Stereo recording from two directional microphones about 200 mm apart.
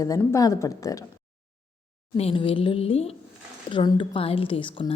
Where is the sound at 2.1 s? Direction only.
30° left (ahead or behind).